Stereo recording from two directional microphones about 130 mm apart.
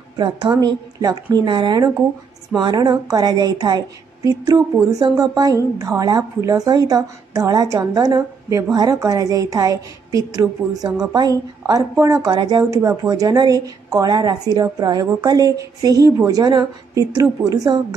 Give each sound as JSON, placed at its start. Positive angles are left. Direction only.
{"t": 0.5, "sound": "a woman's voice", "side_deg": -30}